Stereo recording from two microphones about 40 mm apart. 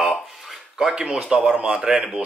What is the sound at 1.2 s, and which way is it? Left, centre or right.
Speech, centre.